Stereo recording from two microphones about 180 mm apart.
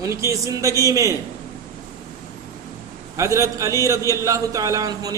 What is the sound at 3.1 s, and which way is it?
A man's voice, 15° right (ahead or behind).